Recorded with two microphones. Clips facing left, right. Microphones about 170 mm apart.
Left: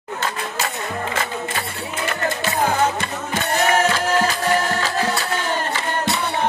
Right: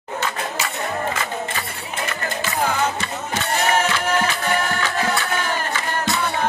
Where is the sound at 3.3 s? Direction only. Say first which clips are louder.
Left 2 dB; 40° left (ahead or behind).